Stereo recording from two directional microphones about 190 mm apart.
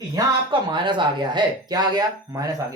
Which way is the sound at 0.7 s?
25° right (ahead or behind).